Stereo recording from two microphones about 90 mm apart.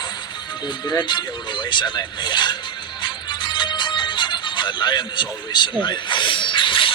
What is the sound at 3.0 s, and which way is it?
Music, 60° left (ahead or behind).